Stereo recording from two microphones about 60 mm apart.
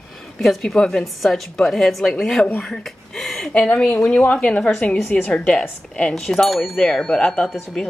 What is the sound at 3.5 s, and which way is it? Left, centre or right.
A woman's voice, left.